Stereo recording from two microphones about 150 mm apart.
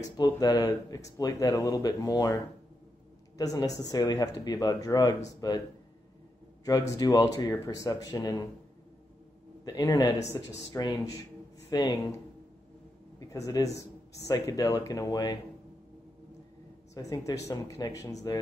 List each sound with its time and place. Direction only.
0.2 s speech: 25° left (ahead or behind)
6.9 s speech: 25° left (ahead or behind)
9.7 s speech: 25° left (ahead or behind)
13.2 s speech: 20° left (ahead or behind)
16.9 s speech: 25° left (ahead or behind)